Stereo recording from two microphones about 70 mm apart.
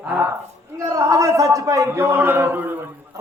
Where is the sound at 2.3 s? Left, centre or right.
Right.